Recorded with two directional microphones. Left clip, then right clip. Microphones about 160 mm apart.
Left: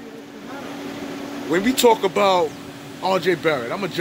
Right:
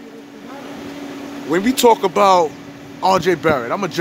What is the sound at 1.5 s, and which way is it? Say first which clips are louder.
A man's voice: right 3 dB; 30° right (ahead or behind).